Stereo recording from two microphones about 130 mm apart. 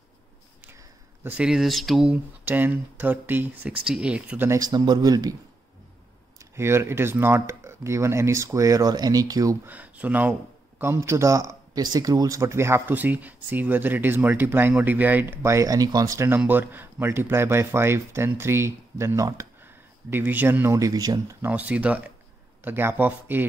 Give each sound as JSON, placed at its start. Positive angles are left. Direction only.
{"t": 1.2, "sound": "speech", "side_deg": -10}
{"t": 2.4, "sound": "speech", "side_deg": -15}
{"t": 4.5, "sound": "a man's voice", "side_deg": -30}
{"t": 6.5, "sound": "speech", "side_deg": -20}
{"t": 9.7, "sound": "speech", "side_deg": -10}
{"t": 20.1, "sound": "speech", "side_deg": -15}
{"t": 21.4, "sound": "speech", "side_deg": -10}